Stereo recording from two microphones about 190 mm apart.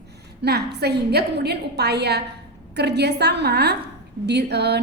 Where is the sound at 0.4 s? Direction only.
60° right (ahead or behind).